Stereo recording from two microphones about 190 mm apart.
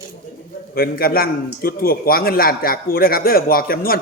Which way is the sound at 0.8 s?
50° left (ahead or behind).